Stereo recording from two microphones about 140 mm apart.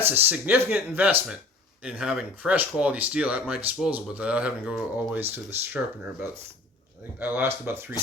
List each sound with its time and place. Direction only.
0.0 s speech: 15° right (ahead or behind)